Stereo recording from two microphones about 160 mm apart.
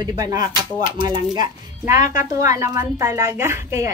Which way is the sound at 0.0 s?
25° right (ahead or behind).